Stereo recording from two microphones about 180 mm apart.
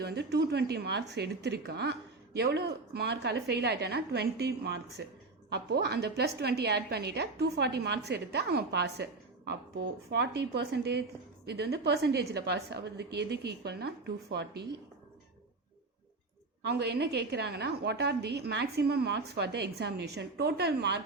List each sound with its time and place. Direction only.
0.0 s a woman's voice: 70° right (ahead or behind)
16.6 s speech: 65° right (ahead or behind)